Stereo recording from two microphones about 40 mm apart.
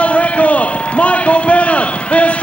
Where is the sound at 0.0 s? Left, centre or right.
Left.